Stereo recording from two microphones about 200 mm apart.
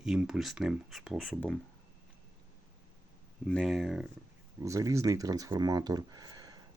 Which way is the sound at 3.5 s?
Centre (ahead or behind).